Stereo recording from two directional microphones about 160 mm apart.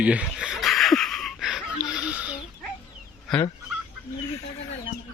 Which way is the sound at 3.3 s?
5° left (ahead or behind).